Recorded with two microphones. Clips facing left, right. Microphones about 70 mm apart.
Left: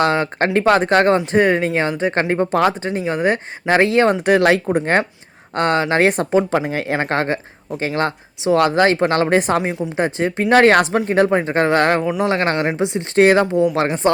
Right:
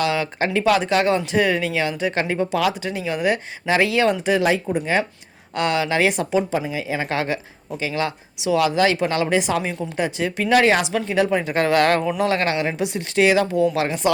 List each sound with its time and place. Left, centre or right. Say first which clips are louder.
0.0 s speech: left 4 dB; left
4.3 s speech: left 5 dB; left
5.5 s speech: left 4 dB; left
6.5 s a woman's voice: left 4 dB; left
10.6 s a woman's voice: left 5 dB; left
13.1 s a woman's voice: left 4 dB; left
13.7 s speech: left 4 dB; left